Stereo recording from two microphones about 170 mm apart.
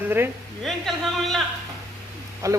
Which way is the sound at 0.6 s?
Centre (ahead or behind).